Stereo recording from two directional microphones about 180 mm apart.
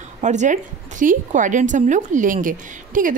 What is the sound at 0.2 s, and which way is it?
A woman's voice, 40° right (ahead or behind).